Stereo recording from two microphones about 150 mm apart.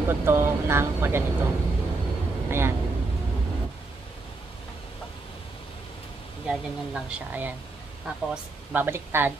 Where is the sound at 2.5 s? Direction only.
15° right (ahead or behind).